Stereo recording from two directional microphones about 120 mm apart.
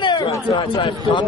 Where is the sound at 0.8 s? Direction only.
40° left (ahead or behind).